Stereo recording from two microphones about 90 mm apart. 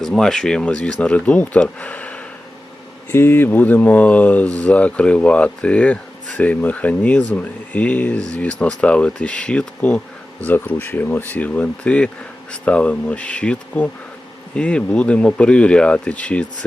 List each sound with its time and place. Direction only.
0.0 s speech: 5° left (ahead or behind)